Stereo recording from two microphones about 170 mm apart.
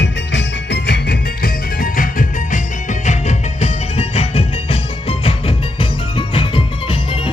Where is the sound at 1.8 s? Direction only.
55° left (ahead or behind).